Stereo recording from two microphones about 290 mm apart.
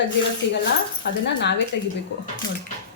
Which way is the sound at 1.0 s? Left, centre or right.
Left.